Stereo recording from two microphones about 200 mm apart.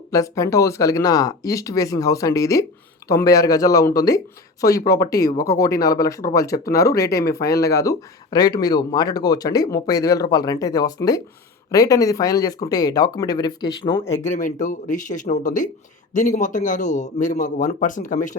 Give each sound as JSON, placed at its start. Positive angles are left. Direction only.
{"t": 0.1, "sound": "speech", "side_deg": 15}
{"t": 7.3, "sound": "speech", "side_deg": 50}
{"t": 7.7, "sound": "speech", "side_deg": 15}
{"t": 14.3, "sound": "a man's voice", "side_deg": 40}